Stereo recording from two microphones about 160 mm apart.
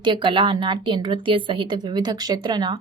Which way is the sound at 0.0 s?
30° right (ahead or behind).